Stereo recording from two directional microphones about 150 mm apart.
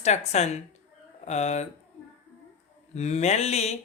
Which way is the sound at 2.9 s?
50° left (ahead or behind).